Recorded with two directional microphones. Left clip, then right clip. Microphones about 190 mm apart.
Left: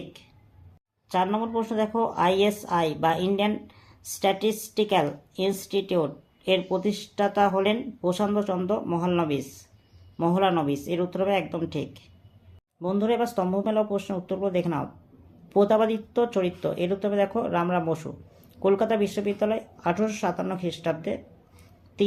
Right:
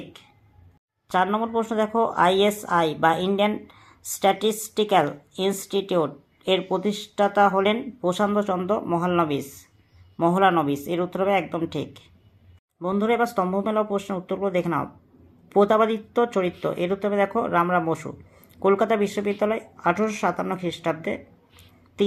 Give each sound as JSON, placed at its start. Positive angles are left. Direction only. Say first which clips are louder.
{"t": 1.0, "sound": "speech", "louder": "right 3 dB", "side_deg": -20}